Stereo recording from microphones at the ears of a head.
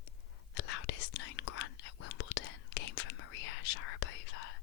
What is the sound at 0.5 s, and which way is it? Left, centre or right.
Whispering, left.